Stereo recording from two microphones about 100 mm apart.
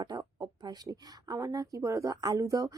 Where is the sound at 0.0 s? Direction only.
40° right (ahead or behind).